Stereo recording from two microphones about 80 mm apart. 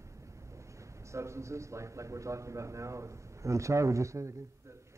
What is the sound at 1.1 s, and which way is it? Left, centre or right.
A man's voice, right.